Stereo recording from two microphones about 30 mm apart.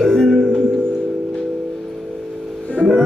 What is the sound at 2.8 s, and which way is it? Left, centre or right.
Music, left.